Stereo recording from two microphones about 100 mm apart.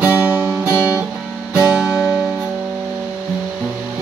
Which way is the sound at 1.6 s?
10° right (ahead or behind).